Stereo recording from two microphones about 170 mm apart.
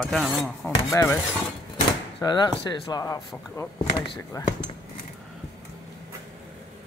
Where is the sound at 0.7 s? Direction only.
15° left (ahead or behind).